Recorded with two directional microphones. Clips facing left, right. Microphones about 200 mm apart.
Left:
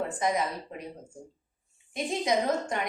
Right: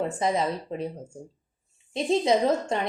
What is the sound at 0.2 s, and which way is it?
Speech, 25° right (ahead or behind).